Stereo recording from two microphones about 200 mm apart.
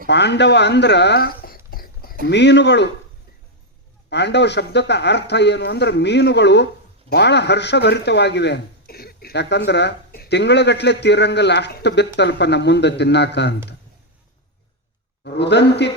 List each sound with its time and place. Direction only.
0.1 s speech: 60° left (ahead or behind)
2.2 s speech: 60° left (ahead or behind)
4.1 s speech: 60° left (ahead or behind)
15.2 s speech: 60° left (ahead or behind)